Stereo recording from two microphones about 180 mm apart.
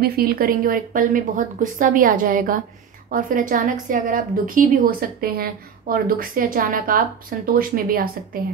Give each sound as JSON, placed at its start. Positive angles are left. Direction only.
{"t": 0.0, "sound": "a woman's voice", "side_deg": -55}